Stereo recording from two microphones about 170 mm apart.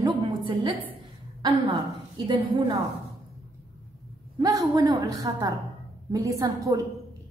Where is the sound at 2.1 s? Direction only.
25° right (ahead or behind).